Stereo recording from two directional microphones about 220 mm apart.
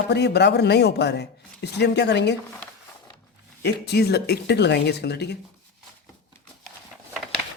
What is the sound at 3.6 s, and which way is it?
Speech, 50° left (ahead or behind).